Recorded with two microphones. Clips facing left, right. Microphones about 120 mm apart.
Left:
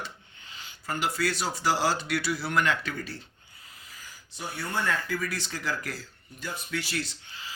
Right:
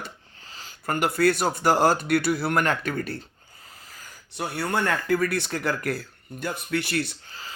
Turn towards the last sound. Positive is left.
turn(degrees=-60)  # may be behind; listen again after turning